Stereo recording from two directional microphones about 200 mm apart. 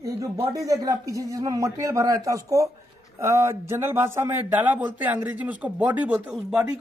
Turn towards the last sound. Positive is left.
turn(degrees=-5)  # may be behind; listen again after turning